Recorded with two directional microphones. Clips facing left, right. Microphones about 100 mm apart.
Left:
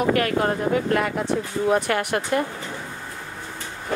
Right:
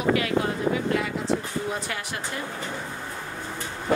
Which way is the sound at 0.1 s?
50° left (ahead or behind).